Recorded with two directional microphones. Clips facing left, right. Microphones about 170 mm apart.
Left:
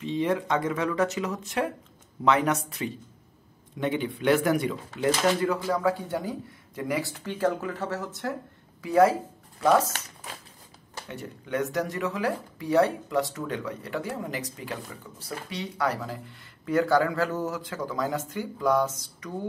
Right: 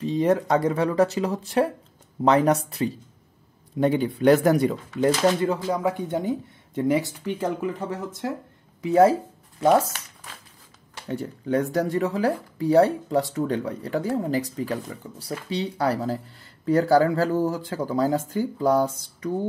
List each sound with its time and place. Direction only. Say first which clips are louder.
0.0 s speech: right 5 dB; 40° right (ahead or behind)
5.4 s speech: right 2 dB; 25° right (ahead or behind)
11.1 s speech: right 8 dB; 35° right (ahead or behind)